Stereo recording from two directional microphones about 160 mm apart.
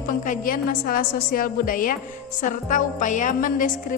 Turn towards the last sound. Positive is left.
turn(degrees=55)  # may be behind; listen again after turning